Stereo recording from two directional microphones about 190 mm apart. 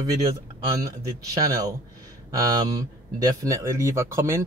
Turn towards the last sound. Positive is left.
turn(degrees=-15)  # may be behind; listen again after turning